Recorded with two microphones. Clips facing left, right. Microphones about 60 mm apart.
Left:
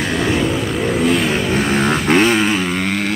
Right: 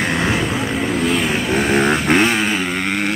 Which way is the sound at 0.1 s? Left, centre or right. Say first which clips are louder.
Left 1 dB; right.